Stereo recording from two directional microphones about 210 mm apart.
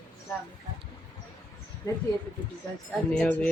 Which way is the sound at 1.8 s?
15° left (ahead or behind).